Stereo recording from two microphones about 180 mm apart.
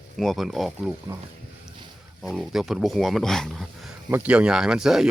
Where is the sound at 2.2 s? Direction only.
Centre (ahead or behind).